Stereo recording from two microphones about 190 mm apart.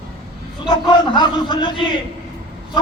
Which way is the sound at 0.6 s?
25° left (ahead or behind).